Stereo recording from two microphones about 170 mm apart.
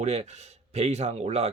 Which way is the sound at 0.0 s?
40° right (ahead or behind).